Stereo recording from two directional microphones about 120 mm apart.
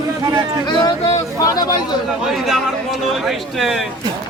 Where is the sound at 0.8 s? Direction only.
40° left (ahead or behind).